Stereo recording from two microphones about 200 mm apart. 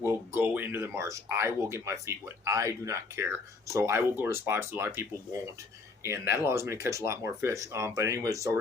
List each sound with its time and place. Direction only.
0.0 s speech: 10° right (ahead or behind)